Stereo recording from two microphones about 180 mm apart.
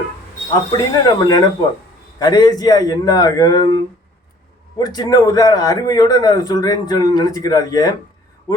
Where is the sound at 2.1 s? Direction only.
20° left (ahead or behind).